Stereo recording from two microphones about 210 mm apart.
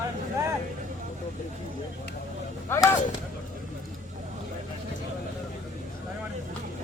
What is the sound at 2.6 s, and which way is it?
Speech, 15° left (ahead or behind).